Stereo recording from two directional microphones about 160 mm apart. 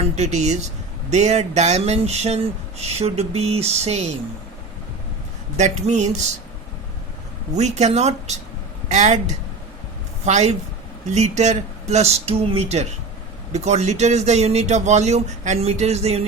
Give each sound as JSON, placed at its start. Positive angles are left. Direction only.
{"t": 0.0, "sound": "a man's voice", "side_deg": -45}
{"t": 5.5, "sound": "a man's voice", "side_deg": -45}
{"t": 7.5, "sound": "a man's voice", "side_deg": -45}